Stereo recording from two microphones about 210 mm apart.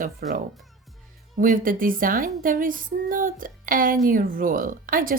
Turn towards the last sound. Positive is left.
turn(degrees=-40)  # may be behind; listen again after turning